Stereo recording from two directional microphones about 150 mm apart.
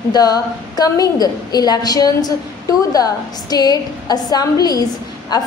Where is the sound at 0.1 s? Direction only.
25° left (ahead or behind).